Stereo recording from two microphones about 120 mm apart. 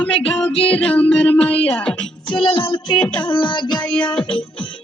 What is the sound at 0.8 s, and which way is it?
Speech, 10° left (ahead or behind).